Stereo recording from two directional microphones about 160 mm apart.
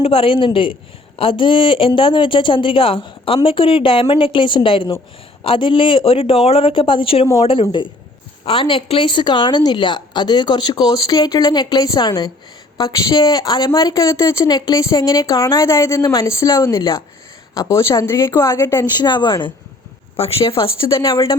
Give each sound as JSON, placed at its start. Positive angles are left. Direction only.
{"t": 0.0, "sound": "a woman's voice", "side_deg": 35}